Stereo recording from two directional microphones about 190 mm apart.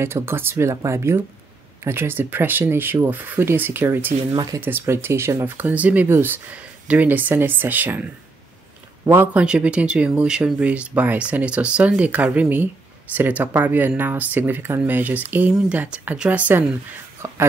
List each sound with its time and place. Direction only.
0.0 s speech: 15° right (ahead or behind)
4.3 s speech: 20° right (ahead or behind)
4.6 s speech: 10° right (ahead or behind)